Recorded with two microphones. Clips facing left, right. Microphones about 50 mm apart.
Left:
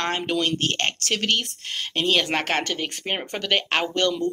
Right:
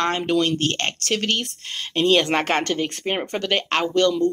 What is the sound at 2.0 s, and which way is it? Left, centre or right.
Speech, centre.